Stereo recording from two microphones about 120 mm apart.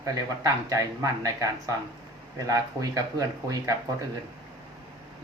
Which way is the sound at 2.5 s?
30° right (ahead or behind).